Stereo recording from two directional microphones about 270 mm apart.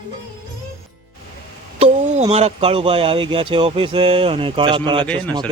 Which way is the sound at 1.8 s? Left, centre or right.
Right.